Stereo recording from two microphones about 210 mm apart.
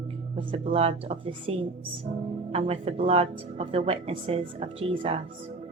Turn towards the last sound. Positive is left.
turn(degrees=-25)  # may be behind; listen again after turning